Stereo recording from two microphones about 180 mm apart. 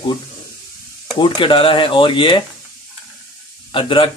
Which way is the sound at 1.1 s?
25° left (ahead or behind).